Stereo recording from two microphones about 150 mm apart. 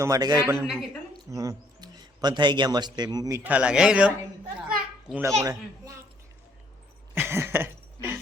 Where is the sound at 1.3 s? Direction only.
20° right (ahead or behind); by 4.1 s 5° right (ahead or behind).